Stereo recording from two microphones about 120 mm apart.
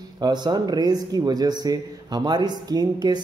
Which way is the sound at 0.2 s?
35° right (ahead or behind).